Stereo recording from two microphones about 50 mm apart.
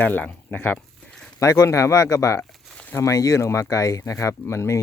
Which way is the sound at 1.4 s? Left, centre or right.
Left.